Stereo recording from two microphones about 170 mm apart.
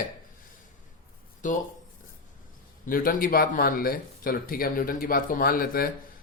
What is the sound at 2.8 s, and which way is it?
Speech, 55° left (ahead or behind).